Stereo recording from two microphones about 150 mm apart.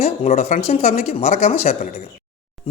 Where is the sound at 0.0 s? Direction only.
45° left (ahead or behind).